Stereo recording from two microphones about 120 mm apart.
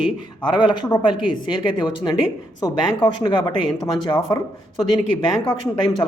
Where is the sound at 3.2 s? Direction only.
35° left (ahead or behind).